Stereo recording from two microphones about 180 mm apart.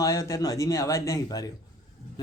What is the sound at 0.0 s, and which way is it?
Speech, 15° left (ahead or behind).